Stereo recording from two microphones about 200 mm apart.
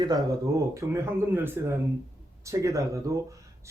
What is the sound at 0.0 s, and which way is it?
A man's voice, 20° right (ahead or behind).